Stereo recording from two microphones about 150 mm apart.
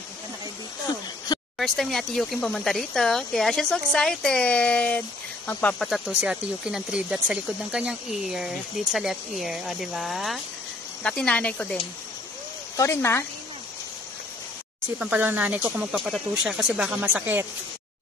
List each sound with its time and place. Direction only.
1.6 s speech: centre (ahead or behind)
5.9 s speech: centre (ahead or behind)
12.7 s speech: 20° left (ahead or behind)
15.0 s speech: 10° right (ahead or behind)